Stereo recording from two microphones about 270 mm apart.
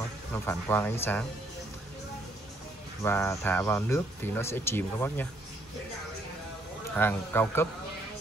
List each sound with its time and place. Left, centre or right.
0.0 s speech: centre
3.0 s speech: centre
7.0 s speech: centre